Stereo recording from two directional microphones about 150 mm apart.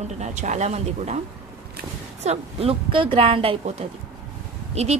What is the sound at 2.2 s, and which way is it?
A woman's voice, 45° right (ahead or behind).